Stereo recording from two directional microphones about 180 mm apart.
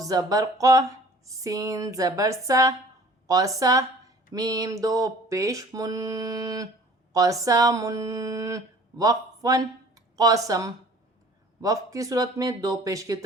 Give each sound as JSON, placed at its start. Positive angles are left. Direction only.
{"t": 0.1, "sound": "speech", "side_deg": -20}